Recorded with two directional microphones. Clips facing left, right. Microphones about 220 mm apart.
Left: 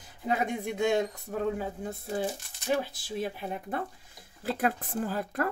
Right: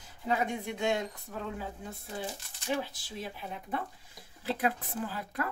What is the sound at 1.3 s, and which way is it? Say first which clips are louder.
Speech: left 9 dB; 35° left (ahead or behind).